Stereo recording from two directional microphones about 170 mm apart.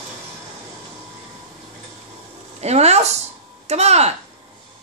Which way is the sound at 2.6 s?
40° right (ahead or behind).